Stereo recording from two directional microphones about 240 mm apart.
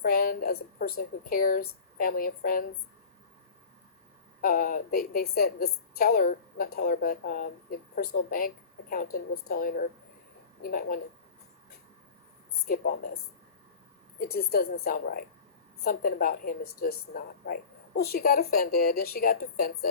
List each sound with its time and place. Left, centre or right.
0.0 s a woman's voice: left
4.4 s a woman's voice: left
12.6 s a woman's voice: left
14.2 s a woman's voice: left